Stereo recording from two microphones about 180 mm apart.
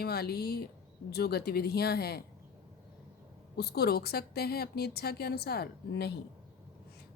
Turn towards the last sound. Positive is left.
turn(degrees=60)  # may be behind; listen again after turning